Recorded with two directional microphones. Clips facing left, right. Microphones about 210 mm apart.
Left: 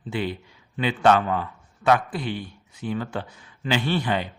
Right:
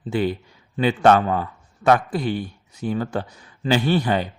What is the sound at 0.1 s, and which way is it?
A man's voice, 45° right (ahead or behind).